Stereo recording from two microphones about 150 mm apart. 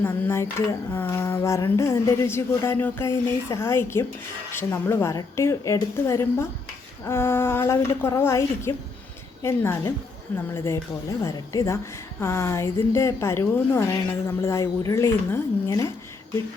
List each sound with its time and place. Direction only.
0.0 s a woman's voice: 15° left (ahead or behind)